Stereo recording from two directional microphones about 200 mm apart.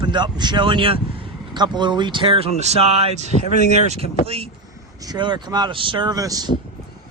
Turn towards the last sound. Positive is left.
turn(degrees=-20)  # may be behind; listen again after turning